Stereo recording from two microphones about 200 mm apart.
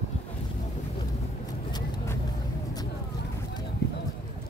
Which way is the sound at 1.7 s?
20° left (ahead or behind).